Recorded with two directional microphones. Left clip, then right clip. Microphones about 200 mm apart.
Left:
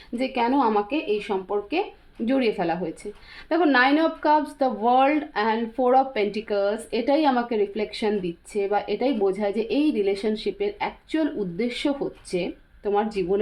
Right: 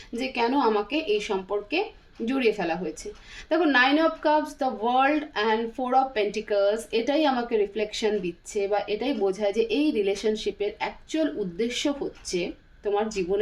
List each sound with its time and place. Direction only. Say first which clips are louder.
0.2 s speech: left 2 dB; 35° left (ahead or behind)